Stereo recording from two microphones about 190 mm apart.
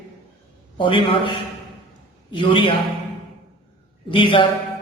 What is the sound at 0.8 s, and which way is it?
A man's voice, 25° left (ahead or behind).